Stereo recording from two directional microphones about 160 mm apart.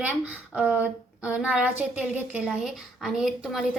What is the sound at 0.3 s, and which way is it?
Speech, 10° right (ahead or behind).